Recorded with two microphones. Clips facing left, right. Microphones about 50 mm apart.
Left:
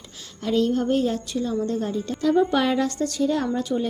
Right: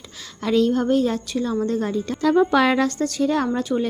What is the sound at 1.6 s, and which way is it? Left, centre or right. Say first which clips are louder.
Speech: right 3 dB; right.